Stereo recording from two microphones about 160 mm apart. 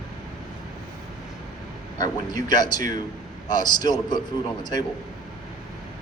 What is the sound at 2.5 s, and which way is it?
A man's voice, 25° left (ahead or behind).